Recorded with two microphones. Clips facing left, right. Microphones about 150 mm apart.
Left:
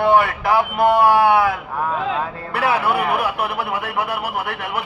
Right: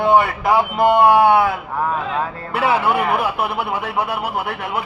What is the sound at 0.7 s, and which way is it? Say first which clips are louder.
Speech: even; centre (ahead or behind).